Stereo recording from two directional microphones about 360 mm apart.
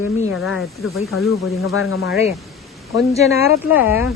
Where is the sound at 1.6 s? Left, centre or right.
Left.